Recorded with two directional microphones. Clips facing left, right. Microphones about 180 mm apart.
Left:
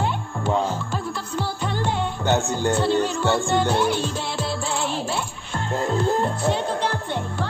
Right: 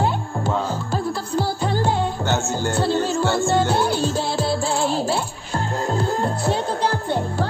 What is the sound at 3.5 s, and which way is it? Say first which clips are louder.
Music: right 1 dB; 35° right (ahead or behind).